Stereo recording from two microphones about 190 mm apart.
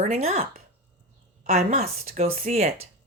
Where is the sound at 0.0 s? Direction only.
35° right (ahead or behind).